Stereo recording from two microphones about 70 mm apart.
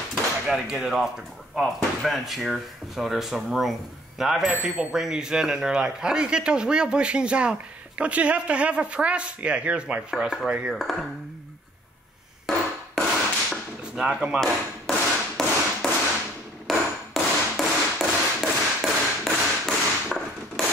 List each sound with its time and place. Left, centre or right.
0.1 s a sound: centre
1.5 s speech: centre
10.1 s speech: centre
10.7 s speech: centre
13.9 s speech: centre
14.4 s tap: centre
16.6 s hammer: centre
19.2 s a sound: centre